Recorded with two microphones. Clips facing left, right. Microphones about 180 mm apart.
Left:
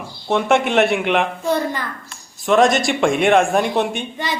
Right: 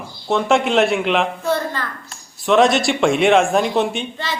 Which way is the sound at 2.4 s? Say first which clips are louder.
Even; centre (ahead or behind).